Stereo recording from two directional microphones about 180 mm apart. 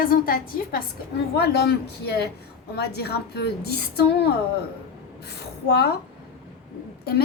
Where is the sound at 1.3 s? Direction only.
65° left (ahead or behind).